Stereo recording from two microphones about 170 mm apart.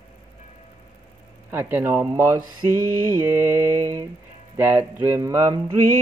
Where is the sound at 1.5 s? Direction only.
10° right (ahead or behind).